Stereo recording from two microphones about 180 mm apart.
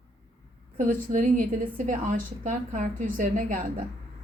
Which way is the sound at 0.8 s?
45° right (ahead or behind).